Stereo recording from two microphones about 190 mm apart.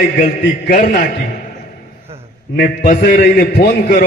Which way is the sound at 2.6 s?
50° left (ahead or behind).